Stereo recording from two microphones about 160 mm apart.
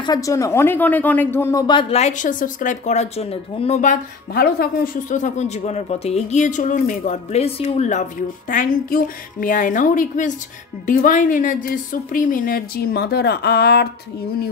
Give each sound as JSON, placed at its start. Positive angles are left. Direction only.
{"t": 0.0, "sound": "speech", "side_deg": 25}
{"t": 1.8, "sound": "speech", "side_deg": 40}